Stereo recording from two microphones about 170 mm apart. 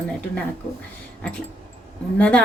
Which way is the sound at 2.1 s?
5° left (ahead or behind).